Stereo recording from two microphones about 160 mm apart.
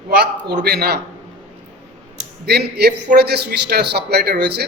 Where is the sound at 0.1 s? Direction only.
90° right.